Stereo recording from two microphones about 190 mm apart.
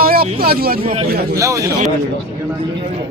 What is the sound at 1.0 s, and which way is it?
Speech, 55° right (ahead or behind).